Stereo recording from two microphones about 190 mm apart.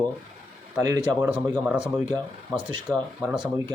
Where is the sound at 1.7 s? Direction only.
5° right (ahead or behind).